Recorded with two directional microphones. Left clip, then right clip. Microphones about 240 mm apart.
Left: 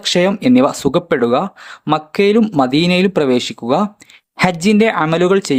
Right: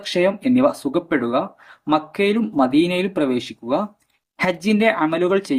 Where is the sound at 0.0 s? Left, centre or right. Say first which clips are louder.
Left 5 dB; left.